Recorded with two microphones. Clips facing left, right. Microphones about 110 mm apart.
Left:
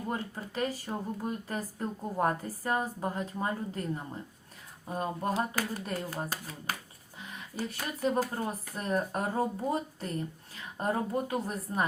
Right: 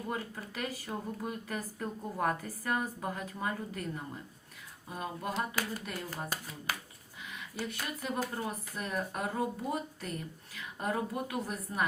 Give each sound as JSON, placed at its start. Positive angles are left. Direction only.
{"t": 0.1, "sound": "speech", "side_deg": 30}
{"t": 4.9, "sound": "speech", "side_deg": 40}